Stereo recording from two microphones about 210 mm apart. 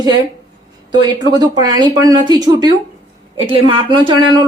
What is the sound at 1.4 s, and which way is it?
A woman's voice, 20° right (ahead or behind).